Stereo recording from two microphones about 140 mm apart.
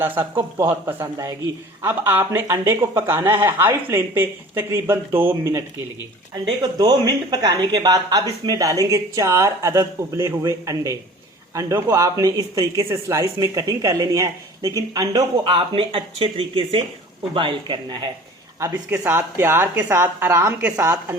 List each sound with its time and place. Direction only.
0.0 s speech: 15° right (ahead or behind)
6.3 s speech: 30° right (ahead or behind)
18.6 s speech: 15° right (ahead or behind)